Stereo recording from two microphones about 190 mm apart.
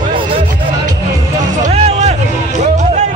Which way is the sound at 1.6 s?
35° right (ahead or behind).